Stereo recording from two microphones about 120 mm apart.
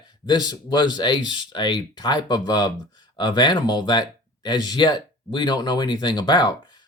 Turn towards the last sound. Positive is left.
turn(degrees=40)  # may be behind; listen again after turning